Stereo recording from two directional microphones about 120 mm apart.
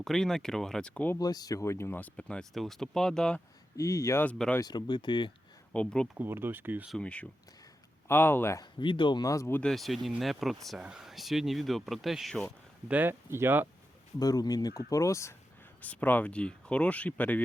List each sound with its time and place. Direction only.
0.0 s speech: 5° left (ahead or behind)
1.2 s speech: 35° left (ahead or behind); by 3.4 s 5° left (ahead or behind)
3.8 s speech: 25° left (ahead or behind)
4.2 s speech: 10° left (ahead or behind)
4.6 s speech: 40° left (ahead or behind)
5.7 s speech: 10° left (ahead or behind)
6.1 s speech: 20° right (ahead or behind)
7.0 s speech: 10° left (ahead or behind)
8.8 s speech: 45° left (ahead or behind)
9.5 s speech: 10° left (ahead or behind)
9.7 s speech: centre (ahead or behind)
12.9 s speech: 15° right (ahead or behind)
14.2 s speech: 30° left (ahead or behind)
15.8 s speech: 15° left (ahead or behind)